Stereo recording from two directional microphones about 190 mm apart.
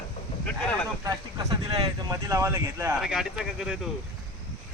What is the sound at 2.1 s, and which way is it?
Speech, 15° right (ahead or behind).